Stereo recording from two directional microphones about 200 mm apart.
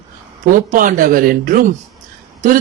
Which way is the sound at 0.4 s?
40° right (ahead or behind).